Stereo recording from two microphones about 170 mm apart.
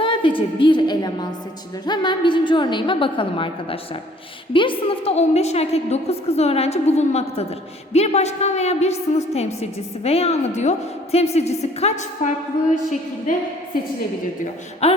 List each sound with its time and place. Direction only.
0.0 s a woman's voice: 30° left (ahead or behind); by 13.4 s 50° left (ahead or behind)
14.8 s a woman's voice: 40° left (ahead or behind)